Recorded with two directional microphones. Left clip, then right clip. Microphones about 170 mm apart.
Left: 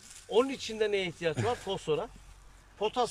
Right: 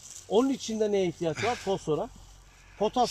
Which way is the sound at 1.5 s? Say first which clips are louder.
Right 3 dB; 30° right (ahead or behind).